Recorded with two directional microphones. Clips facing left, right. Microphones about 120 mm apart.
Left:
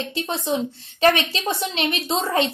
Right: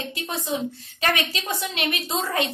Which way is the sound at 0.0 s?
25° left (ahead or behind).